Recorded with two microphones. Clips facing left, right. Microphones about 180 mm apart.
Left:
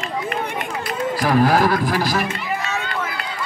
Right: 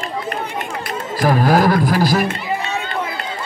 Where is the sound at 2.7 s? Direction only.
25° right (ahead or behind).